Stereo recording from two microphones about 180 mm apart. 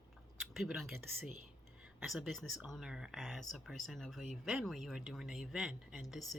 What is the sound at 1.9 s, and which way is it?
Speech, centre (ahead or behind).